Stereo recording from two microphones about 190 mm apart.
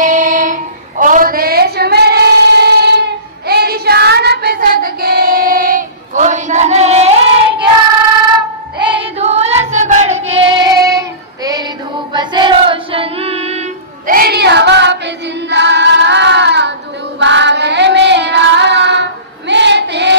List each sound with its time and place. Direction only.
0.0 s child singing: 45° right (ahead or behind)
8.8 s child singing: 25° right (ahead or behind)
14.1 s child singing: 55° right (ahead or behind)